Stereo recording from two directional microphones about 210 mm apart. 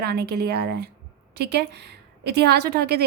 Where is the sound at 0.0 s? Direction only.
50° right (ahead or behind).